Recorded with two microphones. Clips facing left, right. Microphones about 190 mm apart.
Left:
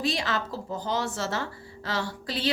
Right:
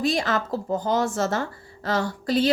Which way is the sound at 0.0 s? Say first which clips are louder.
Right 5 dB; 45° right (ahead or behind).